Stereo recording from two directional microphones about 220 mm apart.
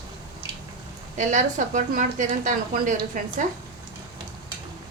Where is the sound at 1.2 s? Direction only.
35° right (ahead or behind).